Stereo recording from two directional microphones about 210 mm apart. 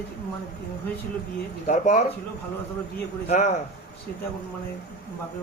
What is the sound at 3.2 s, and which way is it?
Speech, 30° left (ahead or behind).